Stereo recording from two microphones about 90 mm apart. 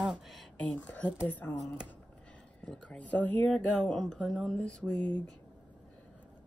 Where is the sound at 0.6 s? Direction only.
15° left (ahead or behind).